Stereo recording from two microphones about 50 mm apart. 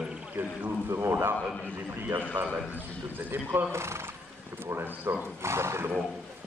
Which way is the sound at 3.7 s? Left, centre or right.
Right.